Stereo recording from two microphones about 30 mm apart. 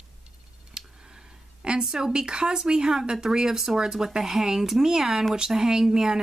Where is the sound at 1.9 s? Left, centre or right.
Right.